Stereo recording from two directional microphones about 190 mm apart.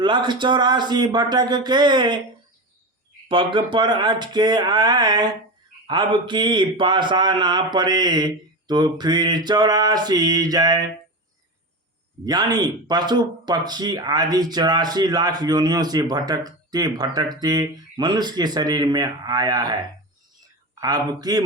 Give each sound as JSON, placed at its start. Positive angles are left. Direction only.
{"t": 0.0, "sound": "speech", "side_deg": -25}
{"t": 3.2, "sound": "speech", "side_deg": -25}
{"t": 12.2, "sound": "speech", "side_deg": -20}
{"t": 20.8, "sound": "speech", "side_deg": -20}